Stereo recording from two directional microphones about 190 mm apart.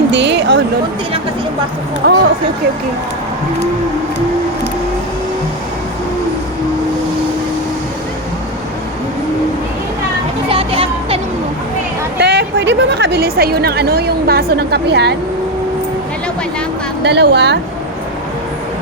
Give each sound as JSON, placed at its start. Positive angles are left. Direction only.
{"t": 0.1, "sound": "a sound", "side_deg": -65}
{"t": 2.0, "sound": "a woman's voice", "side_deg": -55}
{"t": 10.5, "sound": "children playing", "side_deg": -30}
{"t": 12.2, "sound": "a woman's voice", "side_deg": -65}
{"t": 17.0, "sound": "a woman's voice", "side_deg": -65}